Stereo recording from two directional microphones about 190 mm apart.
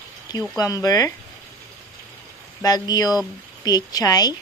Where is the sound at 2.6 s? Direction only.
20° left (ahead or behind).